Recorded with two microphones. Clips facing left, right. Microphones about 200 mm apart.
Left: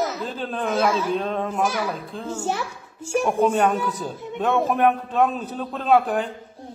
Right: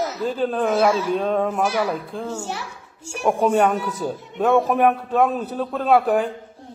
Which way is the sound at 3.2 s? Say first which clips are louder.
Right 3 dB; 10° right (ahead or behind).